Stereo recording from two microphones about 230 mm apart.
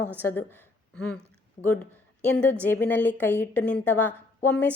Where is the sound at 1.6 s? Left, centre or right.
Left.